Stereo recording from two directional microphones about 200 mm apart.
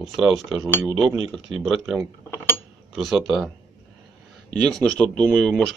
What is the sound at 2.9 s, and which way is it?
Speech, centre (ahead or behind).